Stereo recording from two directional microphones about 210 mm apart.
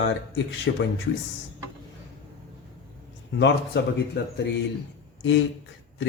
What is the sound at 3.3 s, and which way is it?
Speech, 55° left (ahead or behind).